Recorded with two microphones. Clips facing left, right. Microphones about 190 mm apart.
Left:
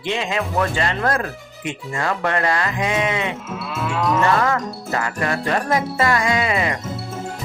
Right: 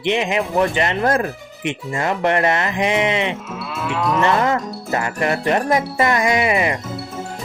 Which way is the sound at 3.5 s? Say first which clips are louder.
Even; centre (ahead or behind).